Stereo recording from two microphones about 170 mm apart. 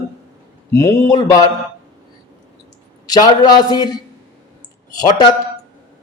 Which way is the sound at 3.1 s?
25° left (ahead or behind).